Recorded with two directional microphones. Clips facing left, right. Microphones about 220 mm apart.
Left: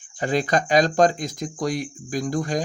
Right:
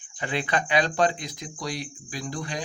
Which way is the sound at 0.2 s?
40° left (ahead or behind).